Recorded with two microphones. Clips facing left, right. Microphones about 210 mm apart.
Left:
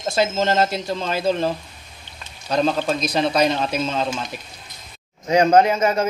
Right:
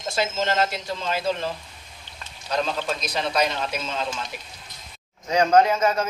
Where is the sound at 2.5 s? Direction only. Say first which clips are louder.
Left 6 dB; 40° left (ahead or behind).